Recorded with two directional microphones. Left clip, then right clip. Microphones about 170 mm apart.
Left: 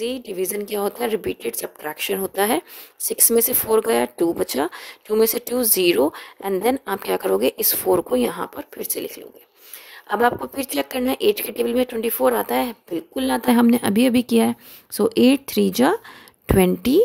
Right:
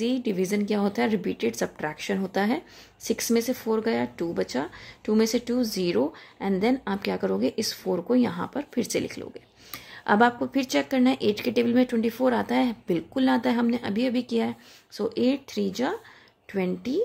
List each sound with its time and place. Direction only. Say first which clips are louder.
0.0 s speech: left 2 dB; 35° left (ahead or behind); by 17.0 s 50° left (ahead or behind)